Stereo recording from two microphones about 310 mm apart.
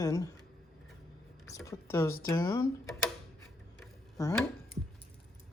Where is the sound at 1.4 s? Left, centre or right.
Centre.